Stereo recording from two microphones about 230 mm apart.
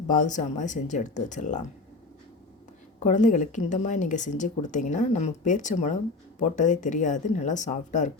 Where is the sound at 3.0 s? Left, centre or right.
Left.